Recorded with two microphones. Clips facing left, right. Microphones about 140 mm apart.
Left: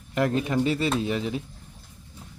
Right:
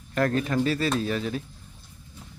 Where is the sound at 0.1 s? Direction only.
20° left (ahead or behind).